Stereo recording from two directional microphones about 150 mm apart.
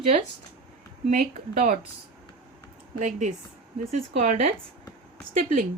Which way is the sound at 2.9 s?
55° right (ahead or behind).